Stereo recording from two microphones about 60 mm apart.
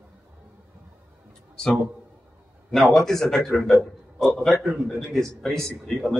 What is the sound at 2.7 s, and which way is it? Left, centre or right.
A man's voice, centre.